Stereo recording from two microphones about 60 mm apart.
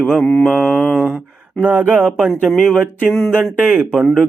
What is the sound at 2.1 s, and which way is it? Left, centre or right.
Mantra, centre.